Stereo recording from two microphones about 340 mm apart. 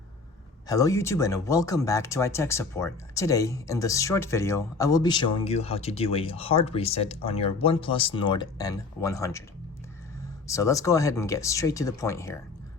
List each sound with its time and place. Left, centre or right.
0.7 s speech: centre
10.4 s speech: centre